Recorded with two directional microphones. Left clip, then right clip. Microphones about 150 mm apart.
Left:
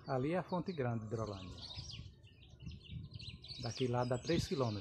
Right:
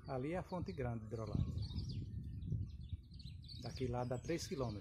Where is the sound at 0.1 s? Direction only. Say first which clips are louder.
Left 6 dB; 15° right (ahead or behind).